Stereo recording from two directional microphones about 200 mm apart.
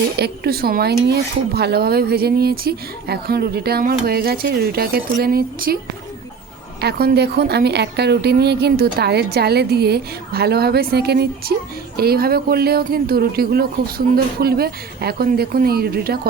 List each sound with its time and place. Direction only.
0.2 s speech: 50° right (ahead or behind)
6.8 s speech: 50° right (ahead or behind)